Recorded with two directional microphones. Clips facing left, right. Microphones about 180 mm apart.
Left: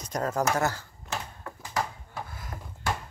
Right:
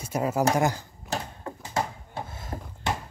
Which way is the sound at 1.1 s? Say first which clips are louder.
Right 4 dB; 30° right (ahead or behind).